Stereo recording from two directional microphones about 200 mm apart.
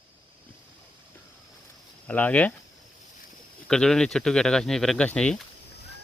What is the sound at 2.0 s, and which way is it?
Speech, 5° left (ahead or behind).